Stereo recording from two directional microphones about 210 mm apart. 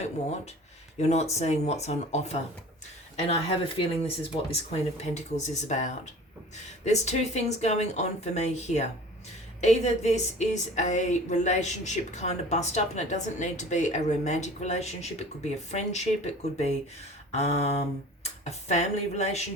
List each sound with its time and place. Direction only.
1.1 s a woman's voice: 30° left (ahead or behind)
17.3 s a sound: 30° left (ahead or behind)
18.7 s a woman's voice: 30° left (ahead or behind)